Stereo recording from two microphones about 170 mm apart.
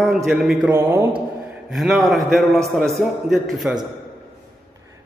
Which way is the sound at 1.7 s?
Centre (ahead or behind).